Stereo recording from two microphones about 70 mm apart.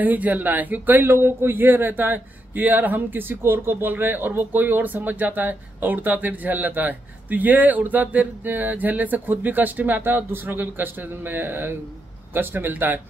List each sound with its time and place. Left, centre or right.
0.0 s a man's voice: right